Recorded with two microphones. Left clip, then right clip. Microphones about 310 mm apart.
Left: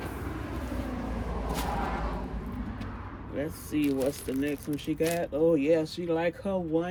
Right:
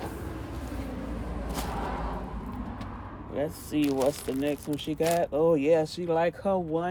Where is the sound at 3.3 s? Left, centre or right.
Centre.